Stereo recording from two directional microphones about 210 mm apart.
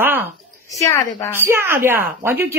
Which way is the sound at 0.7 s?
15° left (ahead or behind).